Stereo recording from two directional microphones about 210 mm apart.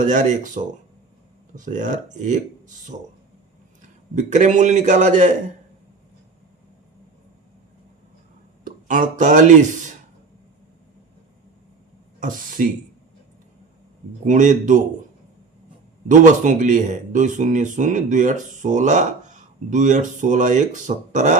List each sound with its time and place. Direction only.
0.0 s speech: 35° right (ahead or behind)
4.1 s speech: 35° right (ahead or behind)
8.6 s speech: 40° right (ahead or behind)
12.2 s speech: 40° right (ahead or behind)
14.3 s speech: 35° right (ahead or behind)
16.0 s speech: 35° right (ahead or behind)